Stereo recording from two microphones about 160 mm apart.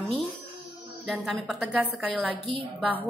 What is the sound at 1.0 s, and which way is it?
A woman's voice, centre (ahead or behind).